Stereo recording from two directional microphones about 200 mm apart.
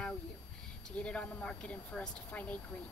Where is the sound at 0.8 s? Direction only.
5° left (ahead or behind).